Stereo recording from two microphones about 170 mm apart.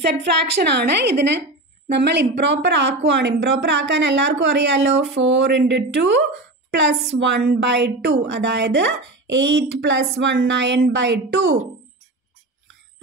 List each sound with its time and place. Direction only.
0.0 s a woman's voice: 85° right